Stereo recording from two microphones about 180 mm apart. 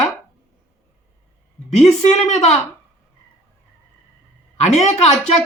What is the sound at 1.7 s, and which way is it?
Speech, 40° left (ahead or behind).